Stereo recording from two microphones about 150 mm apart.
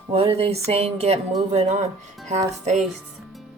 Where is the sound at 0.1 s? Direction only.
40° right (ahead or behind).